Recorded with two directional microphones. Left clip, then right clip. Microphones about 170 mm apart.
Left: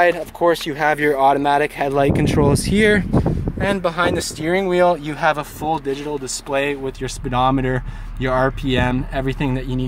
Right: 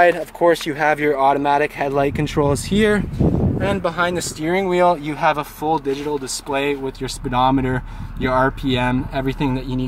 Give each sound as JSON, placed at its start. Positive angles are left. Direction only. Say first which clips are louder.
{"t": 0.0, "sound": "speech", "louder": "right 1 dB", "side_deg": -25}